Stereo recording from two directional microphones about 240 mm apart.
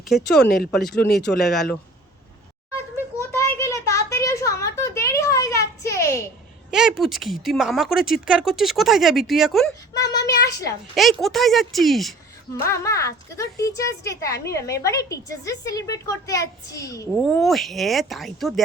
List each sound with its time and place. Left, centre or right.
0.0 s speech: centre
0.4 s speech: left
1.4 s speech: centre
3.6 s a sound: centre
6.7 s speech: centre
9.9 s a sound: centre
10.9 s speech: centre
12.6 s a woman's voice: centre
17.2 s speech: centre